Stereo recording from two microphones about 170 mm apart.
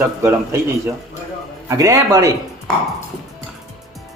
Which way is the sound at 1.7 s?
20° right (ahead or behind).